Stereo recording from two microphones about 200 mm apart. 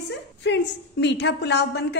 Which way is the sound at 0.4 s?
60° left (ahead or behind).